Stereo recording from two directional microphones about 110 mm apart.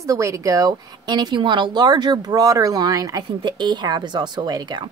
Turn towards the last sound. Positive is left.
turn(degrees=-40)  # may be behind; listen again after turning